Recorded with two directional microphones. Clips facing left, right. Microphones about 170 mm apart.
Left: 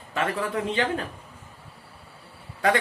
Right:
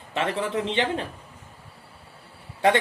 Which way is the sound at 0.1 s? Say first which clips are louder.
Right 1 dB; 25° right (ahead or behind).